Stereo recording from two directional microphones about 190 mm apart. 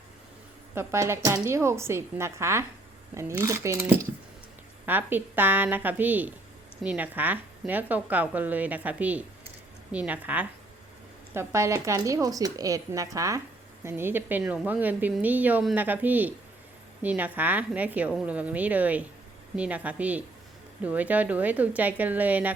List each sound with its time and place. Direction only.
0.7 s a woman's voice: 15° right (ahead or behind)